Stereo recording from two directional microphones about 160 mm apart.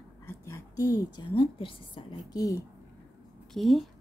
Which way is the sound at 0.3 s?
15° left (ahead or behind).